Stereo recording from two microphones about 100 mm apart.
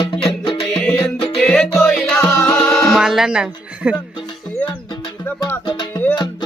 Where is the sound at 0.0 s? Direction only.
55° left (ahead or behind).